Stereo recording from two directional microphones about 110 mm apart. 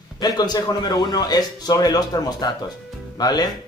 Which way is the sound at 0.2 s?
35° left (ahead or behind).